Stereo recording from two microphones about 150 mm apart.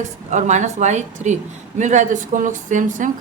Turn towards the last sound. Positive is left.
turn(degrees=-60)  # may be behind; listen again after turning